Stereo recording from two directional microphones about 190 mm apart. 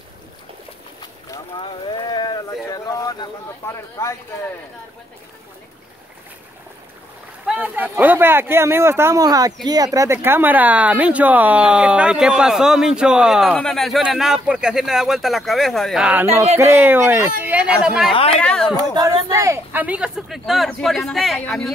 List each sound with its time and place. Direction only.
1.3 s a sound: 25° left (ahead or behind)
7.4 s speech: 5° right (ahead or behind)
18.8 s speech: 20° right (ahead or behind); by 21.7 s 5° left (ahead or behind)